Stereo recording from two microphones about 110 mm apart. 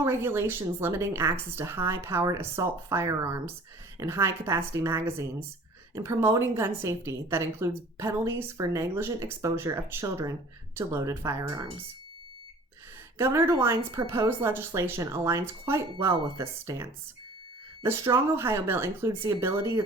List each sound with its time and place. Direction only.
0.0 s a woman's voice: 25° right (ahead or behind)
13.1 s a woman's voice: 20° right (ahead or behind)
18.0 s a woman's voice: 25° right (ahead or behind)